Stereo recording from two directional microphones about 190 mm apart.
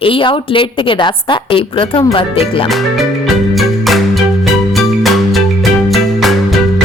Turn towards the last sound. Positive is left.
turn(degrees=0)  # may be behind; listen again after turning